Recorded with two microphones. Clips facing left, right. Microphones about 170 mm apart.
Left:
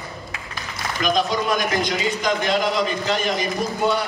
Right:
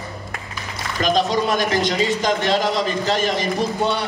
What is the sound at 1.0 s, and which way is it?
A man's voice, 30° right (ahead or behind).